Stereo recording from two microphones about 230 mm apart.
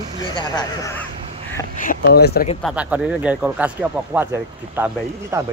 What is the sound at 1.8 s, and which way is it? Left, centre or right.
Speech, left.